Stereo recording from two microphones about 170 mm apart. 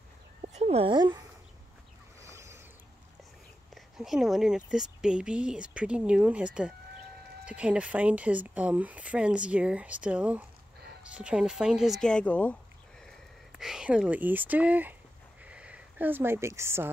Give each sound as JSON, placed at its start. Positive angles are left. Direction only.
{"t": 0.4, "sound": "a sound", "side_deg": -40}
{"t": 3.7, "sound": "speech", "side_deg": 0}
{"t": 13.0, "sound": "speech", "side_deg": 0}